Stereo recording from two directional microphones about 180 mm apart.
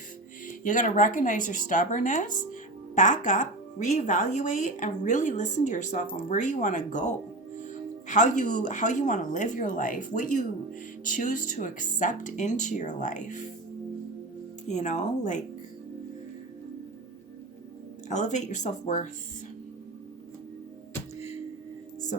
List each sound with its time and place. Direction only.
0.4 s speech: 45° left (ahead or behind)
14.7 s speech: 40° left (ahead or behind)
18.1 s speech: 40° left (ahead or behind)